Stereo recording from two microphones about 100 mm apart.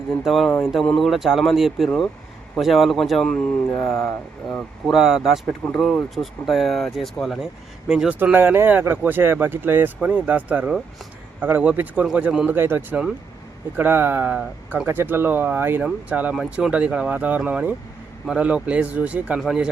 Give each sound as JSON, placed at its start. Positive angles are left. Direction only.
{"t": 0.3, "sound": "speech", "side_deg": 0}
{"t": 5.5, "sound": "speech", "side_deg": 5}
{"t": 8.2, "sound": "speech", "side_deg": -20}
{"t": 14.3, "sound": "speech", "side_deg": -10}
{"t": 14.8, "sound": "speech", "side_deg": -20}
{"t": 19.4, "sound": "speech", "side_deg": -5}